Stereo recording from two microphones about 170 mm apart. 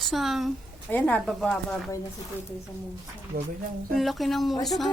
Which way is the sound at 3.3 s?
55° right (ahead or behind).